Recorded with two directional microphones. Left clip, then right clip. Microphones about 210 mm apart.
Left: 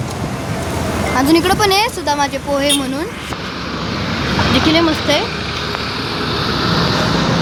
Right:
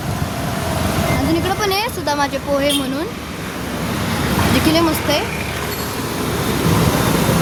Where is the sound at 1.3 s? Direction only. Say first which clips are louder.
Left 8 dB; 20° left (ahead or behind); by 2.7 s 5° left (ahead or behind).